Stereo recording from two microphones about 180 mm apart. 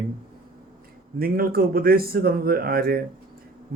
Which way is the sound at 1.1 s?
55° right (ahead or behind).